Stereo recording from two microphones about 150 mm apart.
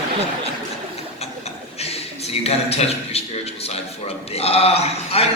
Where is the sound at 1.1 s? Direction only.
45° left (ahead or behind).